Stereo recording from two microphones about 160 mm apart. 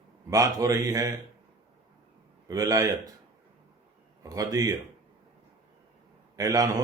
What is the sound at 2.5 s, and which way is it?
Speech, 20° right (ahead or behind).